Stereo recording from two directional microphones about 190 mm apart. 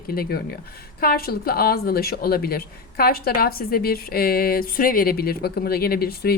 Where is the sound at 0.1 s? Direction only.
55° left (ahead or behind).